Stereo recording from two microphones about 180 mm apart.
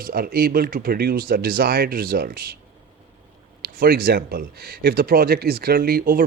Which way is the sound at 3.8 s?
55° right (ahead or behind).